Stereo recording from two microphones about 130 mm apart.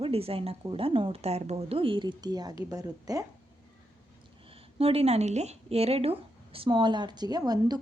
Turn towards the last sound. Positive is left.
turn(degrees=-30)  # may be behind; listen again after turning